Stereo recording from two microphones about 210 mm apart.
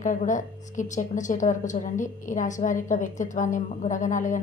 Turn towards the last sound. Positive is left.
turn(degrees=35)  # may be behind; listen again after turning